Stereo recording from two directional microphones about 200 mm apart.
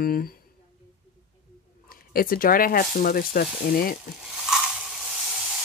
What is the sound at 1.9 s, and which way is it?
Speech, 45° left (ahead or behind).